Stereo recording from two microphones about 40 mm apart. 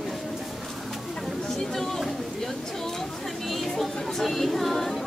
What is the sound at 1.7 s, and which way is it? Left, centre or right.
Chatter, centre.